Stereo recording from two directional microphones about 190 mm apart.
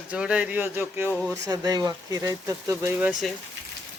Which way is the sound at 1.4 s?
20° right (ahead or behind).